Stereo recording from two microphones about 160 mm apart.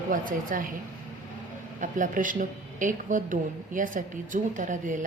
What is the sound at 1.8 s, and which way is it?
A woman's voice, 55° right (ahead or behind).